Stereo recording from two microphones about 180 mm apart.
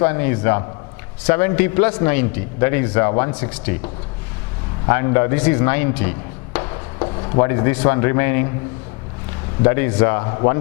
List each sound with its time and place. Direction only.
0.0 s a man's voice: 15° left (ahead or behind)
3.1 s a man's voice: 25° left (ahead or behind)
4.9 s speech: 20° left (ahead or behind)
6.7 s speech: 25° left (ahead or behind)
9.6 s a man's voice: 15° left (ahead or behind)